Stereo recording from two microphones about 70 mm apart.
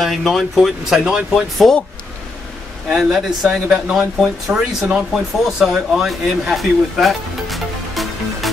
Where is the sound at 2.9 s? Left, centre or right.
Centre.